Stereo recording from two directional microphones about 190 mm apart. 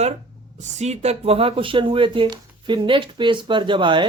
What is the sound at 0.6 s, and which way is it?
Speech, 35° right (ahead or behind).